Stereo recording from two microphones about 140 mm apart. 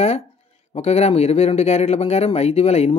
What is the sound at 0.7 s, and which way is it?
Speech, 50° left (ahead or behind).